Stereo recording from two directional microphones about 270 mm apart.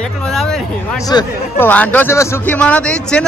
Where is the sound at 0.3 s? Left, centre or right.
Centre.